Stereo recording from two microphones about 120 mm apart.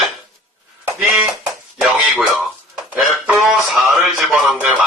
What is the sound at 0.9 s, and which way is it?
Sheep, 5° right (ahead or behind).